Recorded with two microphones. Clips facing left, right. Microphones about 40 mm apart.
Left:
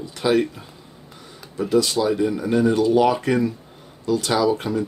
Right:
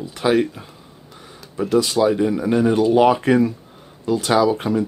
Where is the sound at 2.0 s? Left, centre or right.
Right.